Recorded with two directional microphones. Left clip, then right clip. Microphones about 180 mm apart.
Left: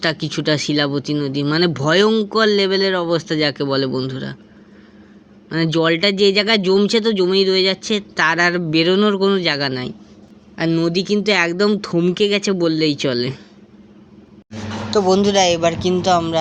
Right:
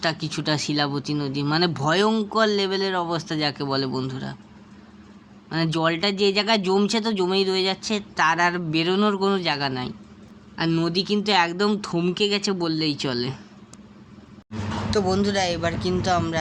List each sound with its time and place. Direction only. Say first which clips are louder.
0.0 s speech: left 6 dB; 15° left (ahead or behind)
5.5 s speech: left 6 dB; 15° left (ahead or behind)
14.8 s speech: left 8 dB; 25° left (ahead or behind)